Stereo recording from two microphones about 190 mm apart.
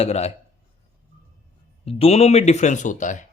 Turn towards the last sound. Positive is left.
turn(degrees=40)  # may be behind; listen again after turning